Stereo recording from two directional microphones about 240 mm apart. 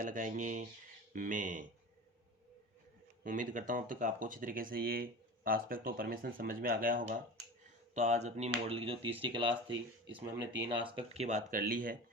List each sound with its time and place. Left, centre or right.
0.0 s speech: right
3.2 s speech: right